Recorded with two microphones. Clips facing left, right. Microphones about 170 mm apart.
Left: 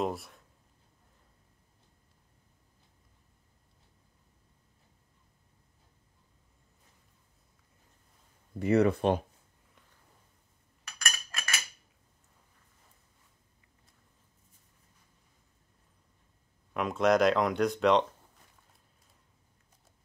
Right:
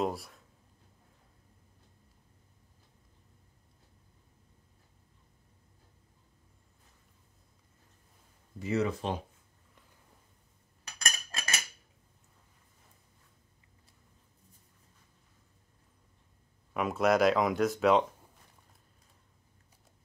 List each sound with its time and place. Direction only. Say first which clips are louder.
0.0 s speech: even; centre (ahead or behind)
8.5 s speech: left 6 dB; 60° left (ahead or behind)
10.9 s chink: even; 30° right (ahead or behind)
16.7 s speech: left 1 dB; 5° right (ahead or behind)